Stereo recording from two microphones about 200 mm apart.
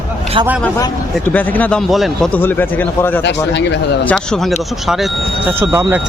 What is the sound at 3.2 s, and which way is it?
Speech, 60° left (ahead or behind).